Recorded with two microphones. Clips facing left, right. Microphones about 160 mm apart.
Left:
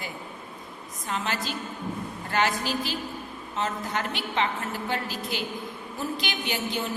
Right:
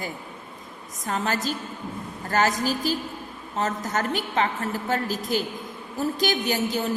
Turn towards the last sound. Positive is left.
turn(degrees=-40)  # may be behind; listen again after turning